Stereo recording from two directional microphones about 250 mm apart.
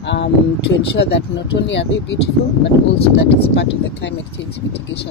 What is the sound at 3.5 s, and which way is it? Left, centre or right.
Speech, left.